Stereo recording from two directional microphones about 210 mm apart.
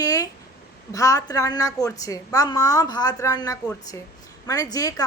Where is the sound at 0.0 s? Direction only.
15° left (ahead or behind).